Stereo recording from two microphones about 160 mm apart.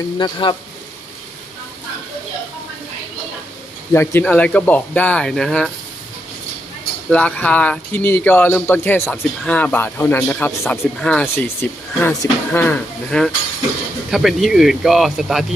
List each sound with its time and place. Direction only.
0.2 s speech: 30° left (ahead or behind)
3.9 s speech: 15° left (ahead or behind)
7.1 s speech: 10° left (ahead or behind)